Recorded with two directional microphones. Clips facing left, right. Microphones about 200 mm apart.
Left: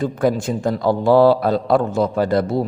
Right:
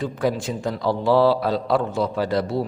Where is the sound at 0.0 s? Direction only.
50° left (ahead or behind).